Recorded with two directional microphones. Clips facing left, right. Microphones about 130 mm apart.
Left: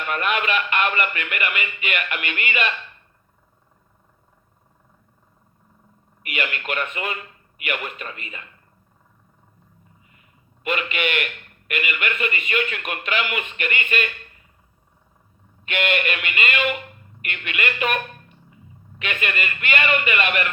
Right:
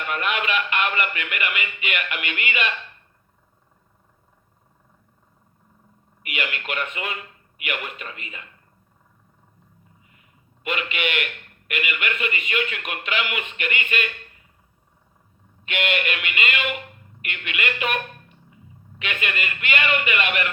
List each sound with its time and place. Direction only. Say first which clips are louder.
0.1 s speech: left 2 dB; 45° left (ahead or behind)
6.2 s speech: left 2 dB; 40° left (ahead or behind)
10.6 s speech: left 2 dB; 40° left (ahead or behind)
15.6 s speech: left 2 dB; 45° left (ahead or behind)
18.9 s speech: left 2 dB; 45° left (ahead or behind)